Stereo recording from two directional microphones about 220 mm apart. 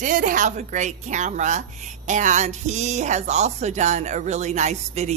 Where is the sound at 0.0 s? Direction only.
35° right (ahead or behind).